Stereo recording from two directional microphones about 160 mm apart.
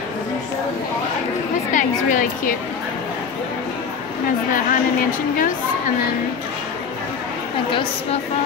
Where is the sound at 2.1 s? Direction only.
55° left (ahead or behind).